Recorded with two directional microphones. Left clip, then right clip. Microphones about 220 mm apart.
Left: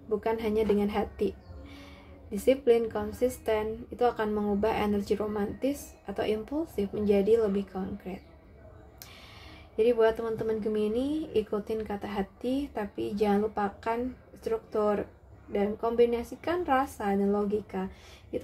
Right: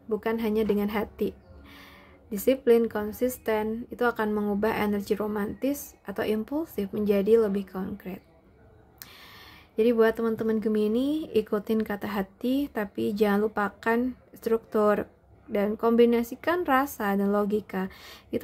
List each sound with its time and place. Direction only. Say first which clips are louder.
0.2 s a woman's voice: right 1 dB; 25° right (ahead or behind)
9.8 s speech: right 2 dB; 30° right (ahead or behind)